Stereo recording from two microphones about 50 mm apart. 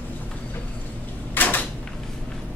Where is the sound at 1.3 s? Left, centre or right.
Left.